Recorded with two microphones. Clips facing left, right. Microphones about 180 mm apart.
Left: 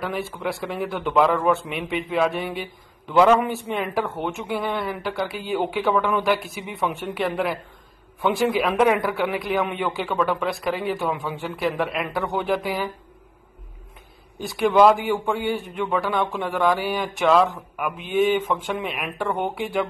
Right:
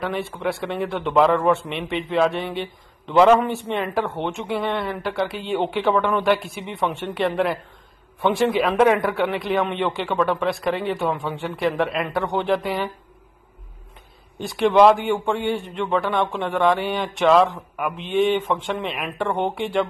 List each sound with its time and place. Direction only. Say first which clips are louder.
0.0 s speech: right 2 dB; centre (ahead or behind)
14.4 s speech: right 1 dB; centre (ahead or behind)
16.0 s speech: right 1 dB; 25° right (ahead or behind)
16.3 s speech: right 3 dB; centre (ahead or behind)
19.1 s speech: right 2 dB; 25° right (ahead or behind)
19.4 s speech: right 2 dB; 5° left (ahead or behind)